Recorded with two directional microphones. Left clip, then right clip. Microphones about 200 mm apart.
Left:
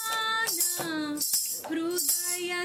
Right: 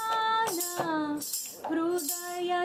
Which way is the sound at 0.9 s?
25° left (ahead or behind).